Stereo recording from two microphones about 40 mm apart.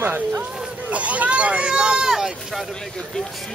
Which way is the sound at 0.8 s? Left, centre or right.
Right.